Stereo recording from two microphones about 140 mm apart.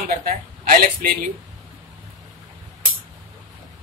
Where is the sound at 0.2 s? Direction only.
90° right.